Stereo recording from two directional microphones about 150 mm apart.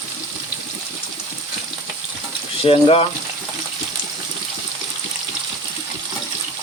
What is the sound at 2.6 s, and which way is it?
Speech, 40° left (ahead or behind).